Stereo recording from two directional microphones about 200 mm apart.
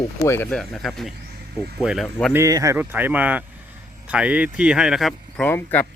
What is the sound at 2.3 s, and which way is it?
Speech, 15° right (ahead or behind).